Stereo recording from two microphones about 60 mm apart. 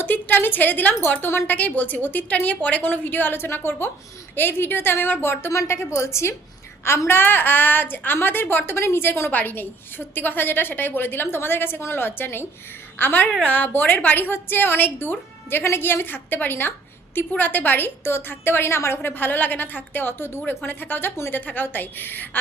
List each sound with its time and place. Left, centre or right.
0.0 s a woman's voice: left
1.5 s a woman's voice: left
5.5 s a woman's voice: left